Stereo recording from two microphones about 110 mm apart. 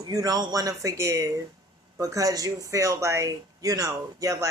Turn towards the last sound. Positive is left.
turn(degrees=-30)  # may be behind; listen again after turning